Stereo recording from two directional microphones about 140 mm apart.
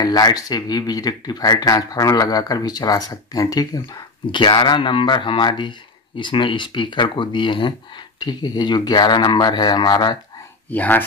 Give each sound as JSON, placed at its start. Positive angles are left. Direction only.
{"t": 0.0, "sound": "speech", "side_deg": 25}
{"t": 10.7, "sound": "speech", "side_deg": 10}